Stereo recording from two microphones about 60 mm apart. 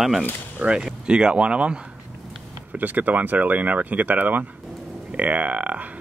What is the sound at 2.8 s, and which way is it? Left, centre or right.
Speech, right.